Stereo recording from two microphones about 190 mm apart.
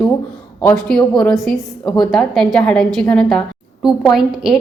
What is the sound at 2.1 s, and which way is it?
A woman's voice, 5° left (ahead or behind).